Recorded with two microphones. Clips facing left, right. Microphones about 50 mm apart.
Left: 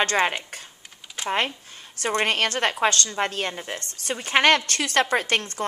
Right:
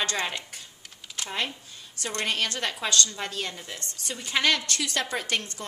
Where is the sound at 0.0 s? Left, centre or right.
Left.